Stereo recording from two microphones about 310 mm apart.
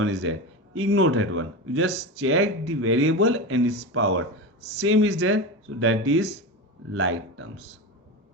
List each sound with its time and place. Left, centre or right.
0.0 s a man's voice: right
1.9 s speech: right
2.2 s speech: right